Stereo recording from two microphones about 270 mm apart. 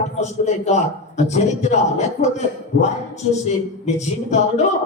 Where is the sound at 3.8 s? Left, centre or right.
Left.